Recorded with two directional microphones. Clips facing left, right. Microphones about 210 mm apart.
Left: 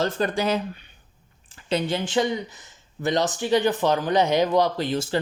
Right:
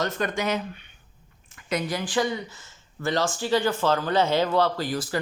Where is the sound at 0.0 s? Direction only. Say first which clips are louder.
Left 3 dB; 30° left (ahead or behind).